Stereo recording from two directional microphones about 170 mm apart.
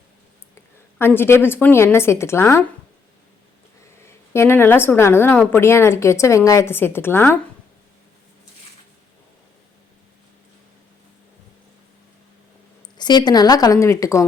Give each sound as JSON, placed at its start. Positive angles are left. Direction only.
{"t": 0.9, "sound": "a woman's voice", "side_deg": 15}
{"t": 4.0, "sound": "a woman's voice", "side_deg": 15}
{"t": 13.0, "sound": "a woman's voice", "side_deg": 25}